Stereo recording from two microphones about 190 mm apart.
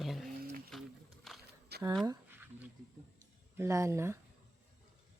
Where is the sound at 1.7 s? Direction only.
60° right (ahead or behind).